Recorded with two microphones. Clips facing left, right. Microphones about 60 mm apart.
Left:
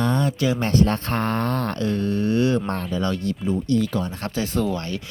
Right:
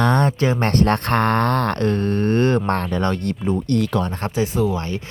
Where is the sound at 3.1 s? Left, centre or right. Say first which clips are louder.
Right 2 dB; right.